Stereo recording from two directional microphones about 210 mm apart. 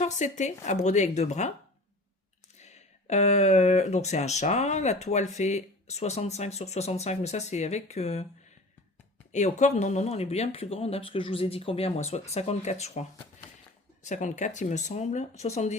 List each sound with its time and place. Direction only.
0.0 s speech: 35° left (ahead or behind)
2.6 s speech: 35° left (ahead or behind)
9.3 s speech: 35° left (ahead or behind)